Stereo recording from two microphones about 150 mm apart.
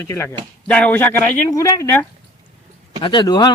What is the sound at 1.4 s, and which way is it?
Speech, 20° left (ahead or behind).